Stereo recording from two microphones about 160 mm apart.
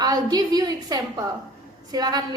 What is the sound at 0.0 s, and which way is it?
A woman's voice, 25° right (ahead or behind).